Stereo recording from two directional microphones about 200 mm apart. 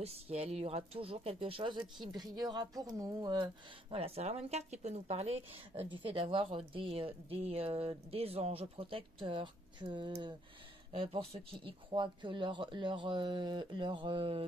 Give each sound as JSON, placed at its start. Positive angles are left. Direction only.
{"t": 0.0, "sound": "a woman's voice", "side_deg": -30}